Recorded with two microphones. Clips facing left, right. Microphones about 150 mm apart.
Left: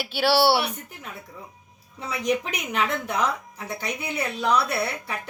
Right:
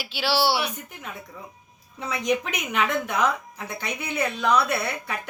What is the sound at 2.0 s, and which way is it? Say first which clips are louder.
A woman's voice: even; 35° left (ahead or behind).